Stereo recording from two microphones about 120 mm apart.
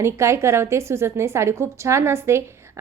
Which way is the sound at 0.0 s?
25° right (ahead or behind).